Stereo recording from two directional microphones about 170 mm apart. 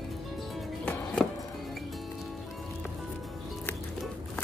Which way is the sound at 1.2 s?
5° left (ahead or behind).